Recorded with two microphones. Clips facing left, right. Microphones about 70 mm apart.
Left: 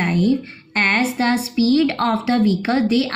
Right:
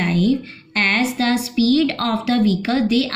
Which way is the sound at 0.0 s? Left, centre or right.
Left.